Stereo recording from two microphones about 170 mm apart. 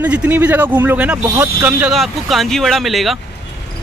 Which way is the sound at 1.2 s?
20° right (ahead or behind).